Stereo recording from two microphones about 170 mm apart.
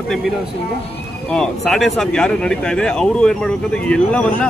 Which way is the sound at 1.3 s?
5° left (ahead or behind).